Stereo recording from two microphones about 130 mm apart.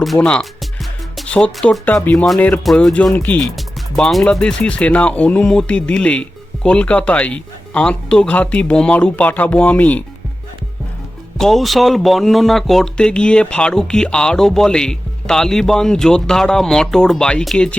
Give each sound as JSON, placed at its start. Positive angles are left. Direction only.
{"t": 0.0, "sound": "speech", "side_deg": 5}
{"t": 11.3, "sound": "speech", "side_deg": 0}